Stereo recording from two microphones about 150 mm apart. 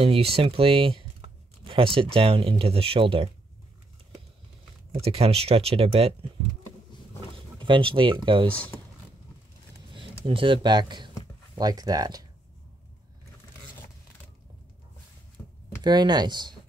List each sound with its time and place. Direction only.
0.0 s speech: 40° right (ahead or behind)
5.0 s speech: 40° right (ahead or behind)
7.5 s speech: 35° right (ahead or behind)
9.8 s speech: 35° right (ahead or behind)
15.4 s a sound: 15° left (ahead or behind)
15.8 s speech: 30° right (ahead or behind)